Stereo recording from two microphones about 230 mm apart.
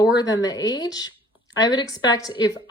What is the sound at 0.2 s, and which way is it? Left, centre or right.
Speech, centre.